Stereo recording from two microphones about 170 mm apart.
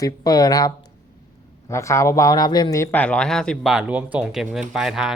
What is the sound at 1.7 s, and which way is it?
Speech, 15° left (ahead or behind).